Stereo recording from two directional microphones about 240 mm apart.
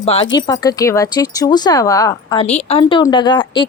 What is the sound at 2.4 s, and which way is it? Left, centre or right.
Speech, left.